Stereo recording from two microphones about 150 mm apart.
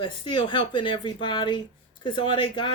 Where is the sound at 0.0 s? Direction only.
30° left (ahead or behind).